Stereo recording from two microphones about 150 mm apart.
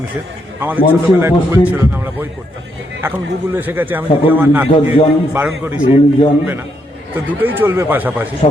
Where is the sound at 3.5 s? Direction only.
15° right (ahead or behind).